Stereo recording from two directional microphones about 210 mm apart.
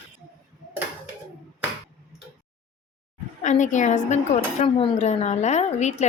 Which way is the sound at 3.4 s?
35° left (ahead or behind).